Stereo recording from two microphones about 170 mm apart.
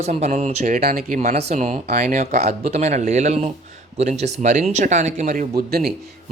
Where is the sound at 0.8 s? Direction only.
60° right (ahead or behind).